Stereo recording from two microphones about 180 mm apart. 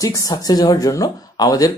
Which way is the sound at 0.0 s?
20° left (ahead or behind).